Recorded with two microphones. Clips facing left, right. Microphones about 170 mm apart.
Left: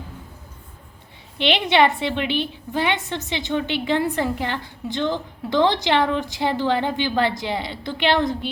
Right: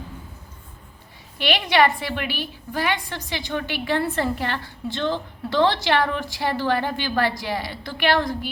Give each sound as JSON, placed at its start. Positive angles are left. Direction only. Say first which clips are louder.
{"t": 1.4, "sound": "a woman's voice", "louder": "left 2 dB", "side_deg": 20}